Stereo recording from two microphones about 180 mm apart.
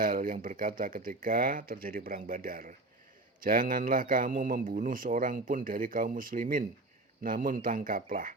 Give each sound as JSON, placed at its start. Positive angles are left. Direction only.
{"t": 0.0, "sound": "a man's voice", "side_deg": -50}